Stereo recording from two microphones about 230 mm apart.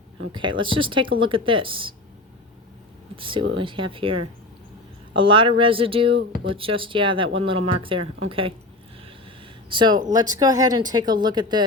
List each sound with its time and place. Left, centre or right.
0.3 s speech: right
3.2 s speech: right
9.6 s speech: centre